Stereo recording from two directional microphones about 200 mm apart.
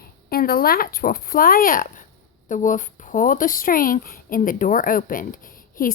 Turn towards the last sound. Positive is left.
turn(degrees=45)  # may be behind; listen again after turning